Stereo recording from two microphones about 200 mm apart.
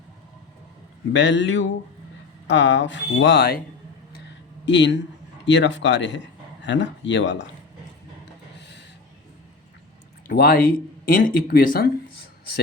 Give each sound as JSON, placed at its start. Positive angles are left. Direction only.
{"t": 1.1, "sound": "speech", "side_deg": 65}
{"t": 4.6, "sound": "speech", "side_deg": 65}
{"t": 8.2, "sound": "a sound", "side_deg": 60}
{"t": 10.2, "sound": "speech", "side_deg": 50}